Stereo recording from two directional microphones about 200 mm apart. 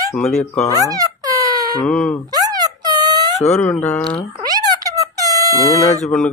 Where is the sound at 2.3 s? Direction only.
20° right (ahead or behind).